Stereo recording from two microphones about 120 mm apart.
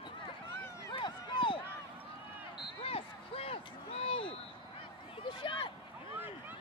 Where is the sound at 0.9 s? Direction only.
40° left (ahead or behind).